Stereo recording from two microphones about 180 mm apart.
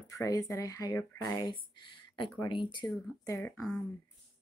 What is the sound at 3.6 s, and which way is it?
Speech, centre (ahead or behind).